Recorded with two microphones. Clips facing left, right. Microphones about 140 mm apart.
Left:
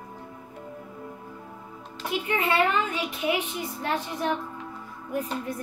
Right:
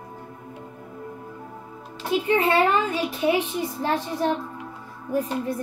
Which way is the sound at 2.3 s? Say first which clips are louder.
Right 4 dB; 35° right (ahead or behind).